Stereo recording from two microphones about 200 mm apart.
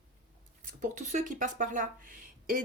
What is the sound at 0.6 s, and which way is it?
Speech, 40° right (ahead or behind).